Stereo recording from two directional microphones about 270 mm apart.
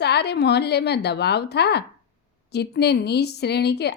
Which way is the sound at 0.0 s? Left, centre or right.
Left.